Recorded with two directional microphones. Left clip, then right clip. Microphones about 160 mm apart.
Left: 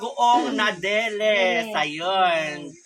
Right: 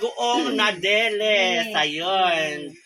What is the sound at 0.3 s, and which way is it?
A woman's voice, 20° left (ahead or behind).